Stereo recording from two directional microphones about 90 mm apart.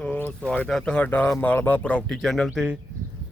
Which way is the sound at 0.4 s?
10° left (ahead or behind).